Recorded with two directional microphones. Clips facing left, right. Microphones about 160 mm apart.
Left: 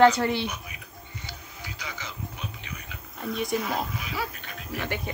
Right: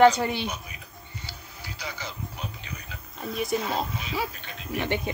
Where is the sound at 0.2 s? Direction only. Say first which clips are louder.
Left 2 dB; 15° right (ahead or behind).